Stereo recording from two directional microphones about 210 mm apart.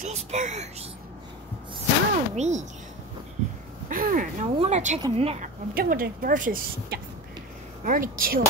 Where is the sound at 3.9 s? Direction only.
40° right (ahead or behind).